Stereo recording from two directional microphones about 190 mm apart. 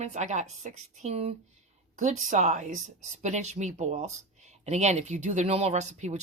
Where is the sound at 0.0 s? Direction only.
35° right (ahead or behind).